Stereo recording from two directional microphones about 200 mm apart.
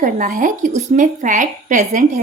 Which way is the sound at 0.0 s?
40° right (ahead or behind).